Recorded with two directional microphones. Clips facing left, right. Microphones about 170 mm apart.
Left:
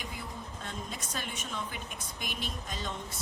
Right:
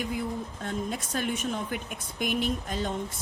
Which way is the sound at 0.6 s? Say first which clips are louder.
Right 8 dB; 50° right (ahead or behind).